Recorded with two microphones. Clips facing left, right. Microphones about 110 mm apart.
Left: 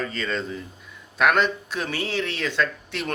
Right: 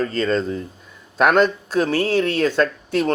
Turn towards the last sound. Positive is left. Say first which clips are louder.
# right 8 dB
turn(degrees=-40)  # may be behind; listen again after turning